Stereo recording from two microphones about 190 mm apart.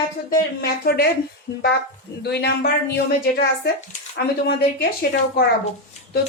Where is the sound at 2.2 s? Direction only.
60° left (ahead or behind).